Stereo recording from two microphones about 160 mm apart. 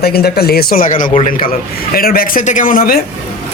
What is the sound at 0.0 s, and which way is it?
Speech, 75° left (ahead or behind).